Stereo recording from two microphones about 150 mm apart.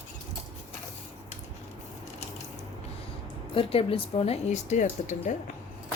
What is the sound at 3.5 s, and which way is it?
Speech, 40° left (ahead or behind).